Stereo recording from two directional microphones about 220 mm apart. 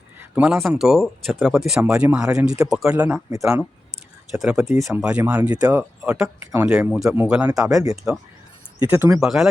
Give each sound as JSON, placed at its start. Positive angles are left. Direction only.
{"t": 0.2, "sound": "speech", "side_deg": -5}
{"t": 4.3, "sound": "speech", "side_deg": 0}
{"t": 6.0, "sound": "speech", "side_deg": 0}
{"t": 9.2, "sound": "speech", "side_deg": 0}